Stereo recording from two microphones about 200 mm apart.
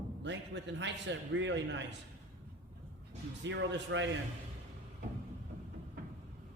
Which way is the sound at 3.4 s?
65° right (ahead or behind).